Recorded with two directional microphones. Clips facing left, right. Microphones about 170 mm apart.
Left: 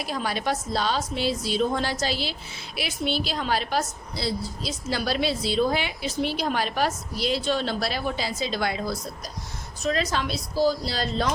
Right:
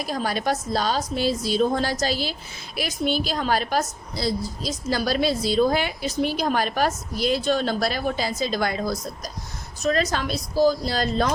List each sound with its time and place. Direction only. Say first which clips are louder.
0.0 s a woman's voice: right 2 dB; 40° right (ahead or behind)